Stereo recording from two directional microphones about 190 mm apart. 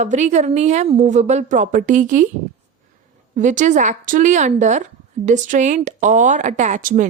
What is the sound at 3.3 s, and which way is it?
Speech, 40° right (ahead or behind).